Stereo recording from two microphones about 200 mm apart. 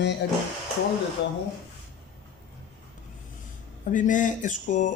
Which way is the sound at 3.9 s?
40° left (ahead or behind).